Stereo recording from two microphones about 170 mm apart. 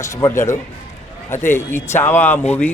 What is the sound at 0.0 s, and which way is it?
Speech, 15° left (ahead or behind).